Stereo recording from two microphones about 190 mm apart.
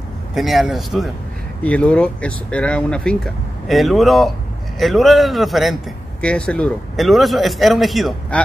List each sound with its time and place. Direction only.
0.3 s speech: centre (ahead or behind)